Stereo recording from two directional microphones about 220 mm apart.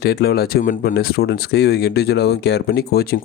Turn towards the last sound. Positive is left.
turn(degrees=45)  # may be behind; listen again after turning